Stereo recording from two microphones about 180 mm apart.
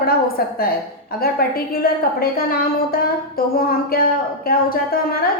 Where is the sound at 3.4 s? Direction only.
55° left (ahead or behind).